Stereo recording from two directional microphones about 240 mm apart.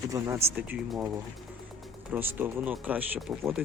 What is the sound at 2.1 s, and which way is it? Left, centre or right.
Speech, centre.